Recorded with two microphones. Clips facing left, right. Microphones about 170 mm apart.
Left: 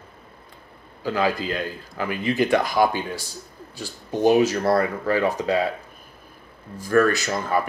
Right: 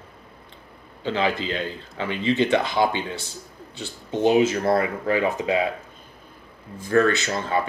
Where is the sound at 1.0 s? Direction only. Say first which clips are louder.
Left 1 dB; 25° right (ahead or behind).